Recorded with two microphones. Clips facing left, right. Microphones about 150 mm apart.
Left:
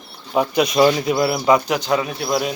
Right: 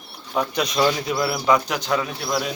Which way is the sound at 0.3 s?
10° left (ahead or behind).